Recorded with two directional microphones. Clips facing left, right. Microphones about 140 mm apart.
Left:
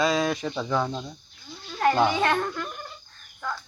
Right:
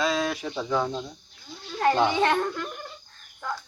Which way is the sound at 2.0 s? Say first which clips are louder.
Even; 25° right (ahead or behind).